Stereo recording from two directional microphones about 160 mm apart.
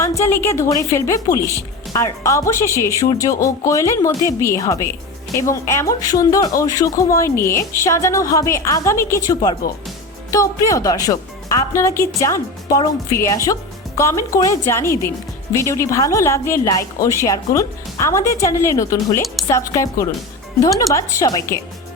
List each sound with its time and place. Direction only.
0.0 s a woman's voice: 20° left (ahead or behind)